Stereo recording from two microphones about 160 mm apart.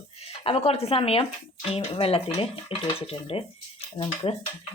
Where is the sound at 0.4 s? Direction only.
40° left (ahead or behind).